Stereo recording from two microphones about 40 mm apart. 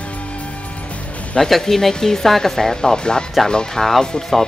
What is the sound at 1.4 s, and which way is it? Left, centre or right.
Speech, centre.